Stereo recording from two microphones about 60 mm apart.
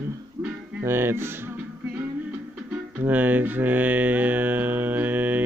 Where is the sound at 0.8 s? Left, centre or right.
Right.